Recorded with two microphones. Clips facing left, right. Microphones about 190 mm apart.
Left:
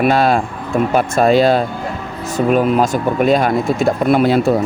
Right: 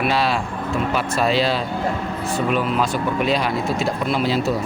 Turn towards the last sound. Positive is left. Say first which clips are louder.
# left 8 dB
turn(degrees=55)  # may be behind; listen again after turning